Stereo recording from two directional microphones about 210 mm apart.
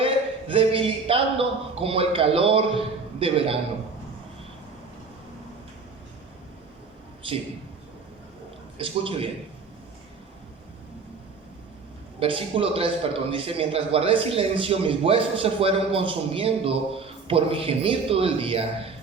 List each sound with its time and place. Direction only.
0.0 s a man's voice: 25° right (ahead or behind)
8.8 s a man's voice: 25° right (ahead or behind)
12.2 s a man's voice: 25° right (ahead or behind)